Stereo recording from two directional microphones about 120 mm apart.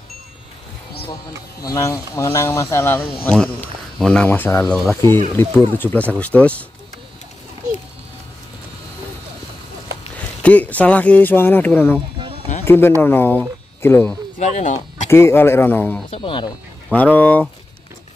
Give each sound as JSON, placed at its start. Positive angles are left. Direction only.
{"t": 1.6, "sound": "speech", "side_deg": 30}
{"t": 4.6, "sound": "speech", "side_deg": 5}
{"t": 5.3, "sound": "speech", "side_deg": 15}
{"t": 10.1, "sound": "speech", "side_deg": 10}
{"t": 14.4, "sound": "speech", "side_deg": 80}
{"t": 15.0, "sound": "speech", "side_deg": 20}
{"t": 16.1, "sound": "speech", "side_deg": 45}
{"t": 16.9, "sound": "speech", "side_deg": 10}